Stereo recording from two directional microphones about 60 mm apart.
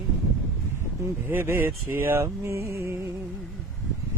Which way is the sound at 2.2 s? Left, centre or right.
Right.